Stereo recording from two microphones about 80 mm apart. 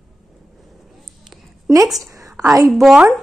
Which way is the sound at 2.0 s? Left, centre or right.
Right.